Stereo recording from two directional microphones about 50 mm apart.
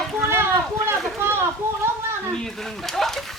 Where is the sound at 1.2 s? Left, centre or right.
Right.